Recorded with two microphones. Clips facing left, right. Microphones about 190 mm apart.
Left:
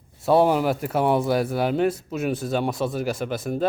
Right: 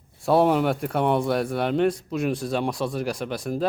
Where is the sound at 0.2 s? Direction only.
Centre (ahead or behind).